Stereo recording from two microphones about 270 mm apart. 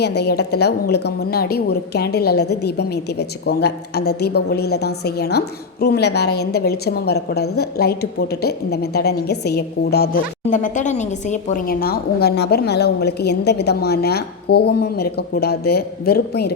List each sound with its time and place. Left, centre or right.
0.0 s a woman's voice: left